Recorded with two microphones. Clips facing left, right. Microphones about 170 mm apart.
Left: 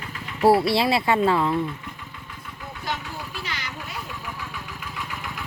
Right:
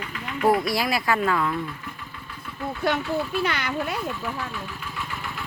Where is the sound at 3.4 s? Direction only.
60° right (ahead or behind).